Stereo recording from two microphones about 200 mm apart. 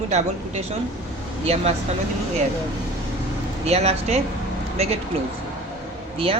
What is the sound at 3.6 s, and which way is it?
Speech, 30° right (ahead or behind).